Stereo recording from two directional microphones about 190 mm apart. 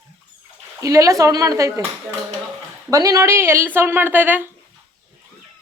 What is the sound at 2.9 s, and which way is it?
Speech, 20° right (ahead or behind).